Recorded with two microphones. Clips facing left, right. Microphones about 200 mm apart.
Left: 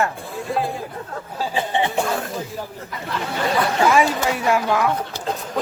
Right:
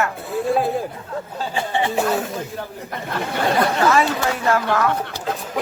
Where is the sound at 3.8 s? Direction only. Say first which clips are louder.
Even; 10° left (ahead or behind).